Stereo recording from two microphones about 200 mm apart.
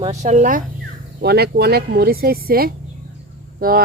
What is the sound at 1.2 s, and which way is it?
A woman's voice, 50° right (ahead or behind).